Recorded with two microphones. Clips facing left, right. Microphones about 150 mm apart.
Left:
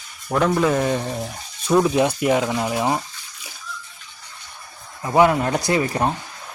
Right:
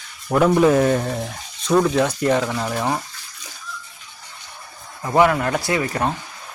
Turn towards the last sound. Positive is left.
turn(degrees=30)  # may be behind; listen again after turning